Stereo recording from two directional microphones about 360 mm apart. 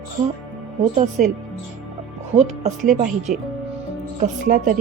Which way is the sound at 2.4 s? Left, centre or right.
Centre.